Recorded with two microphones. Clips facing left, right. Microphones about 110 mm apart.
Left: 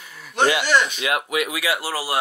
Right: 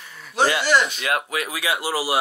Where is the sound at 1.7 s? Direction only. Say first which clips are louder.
Right 2 dB; 15° right (ahead or behind).